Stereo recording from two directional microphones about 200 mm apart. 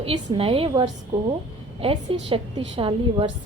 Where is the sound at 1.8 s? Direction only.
30° right (ahead or behind).